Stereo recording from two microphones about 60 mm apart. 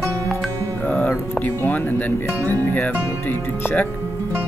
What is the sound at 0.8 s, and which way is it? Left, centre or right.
Music, left.